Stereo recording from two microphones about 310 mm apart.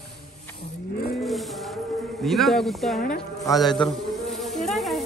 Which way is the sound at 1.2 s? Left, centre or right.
Centre.